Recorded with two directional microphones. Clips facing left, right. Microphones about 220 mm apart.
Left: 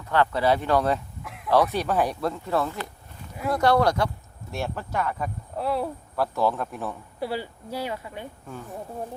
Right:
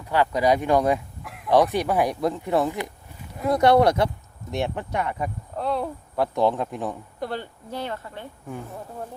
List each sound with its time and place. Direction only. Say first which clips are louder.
0.1 s speech: right 1 dB; 15° right (ahead or behind)
5.5 s speech: even; 5° left (ahead or behind)
6.1 s speech: right 3 dB; 20° right (ahead or behind)
7.2 s speech: left 3 dB; 5° left (ahead or behind)